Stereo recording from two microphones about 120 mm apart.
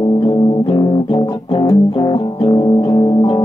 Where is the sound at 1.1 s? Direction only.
35° left (ahead or behind).